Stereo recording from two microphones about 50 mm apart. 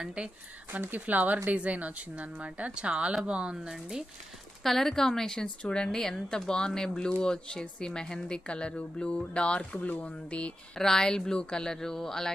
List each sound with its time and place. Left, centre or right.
0.0 s speech: centre
0.7 s a woman's voice: right
4.6 s speech: centre; by 10.8 s left
10.8 s speech: centre